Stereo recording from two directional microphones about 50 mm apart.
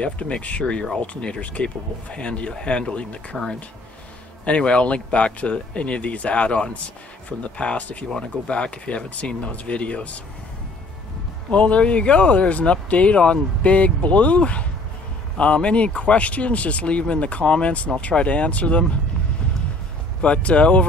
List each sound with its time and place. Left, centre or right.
0.0 s speech: left
4.5 s speech: left
11.5 s speech: left
20.2 s speech: left